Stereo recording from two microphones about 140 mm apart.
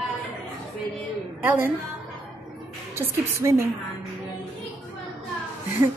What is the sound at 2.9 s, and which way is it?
Speech, 20° right (ahead or behind).